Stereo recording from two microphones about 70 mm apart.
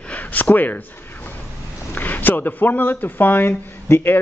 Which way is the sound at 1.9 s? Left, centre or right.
Left.